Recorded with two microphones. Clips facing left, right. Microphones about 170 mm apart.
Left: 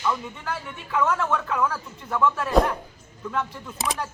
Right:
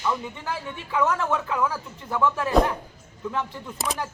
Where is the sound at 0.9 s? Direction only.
15° right (ahead or behind).